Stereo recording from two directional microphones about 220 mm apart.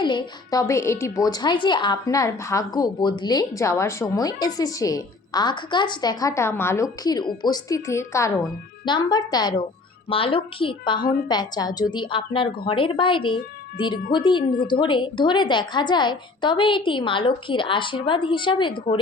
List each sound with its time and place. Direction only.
0.0 s a woman's voice: 20° left (ahead or behind)
14.4 s a woman's voice: 45° left (ahead or behind)
14.7 s a woman's voice: 20° left (ahead or behind)